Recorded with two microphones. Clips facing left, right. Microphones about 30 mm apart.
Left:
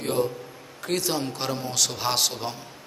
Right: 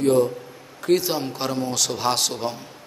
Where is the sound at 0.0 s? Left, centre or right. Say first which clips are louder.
Right 7 dB; centre.